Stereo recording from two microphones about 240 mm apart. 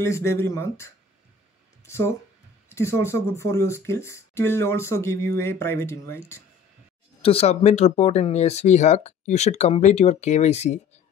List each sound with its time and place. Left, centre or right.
0.0 s speech: centre
7.2 s speech: left